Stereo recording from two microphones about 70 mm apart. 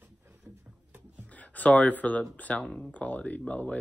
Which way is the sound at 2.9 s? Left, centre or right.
Left.